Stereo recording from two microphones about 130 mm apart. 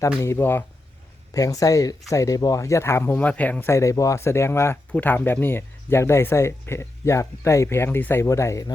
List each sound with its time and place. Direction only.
0.0 s speech: 20° left (ahead or behind)